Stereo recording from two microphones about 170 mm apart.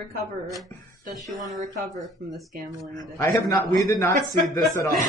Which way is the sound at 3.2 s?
15° left (ahead or behind).